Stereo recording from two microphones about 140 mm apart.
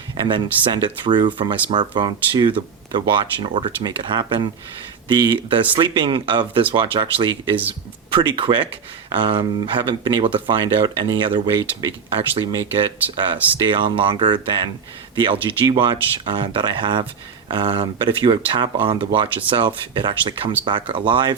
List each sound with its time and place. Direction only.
0.2 s speech: 35° right (ahead or behind)
13.1 s speech: 35° right (ahead or behind)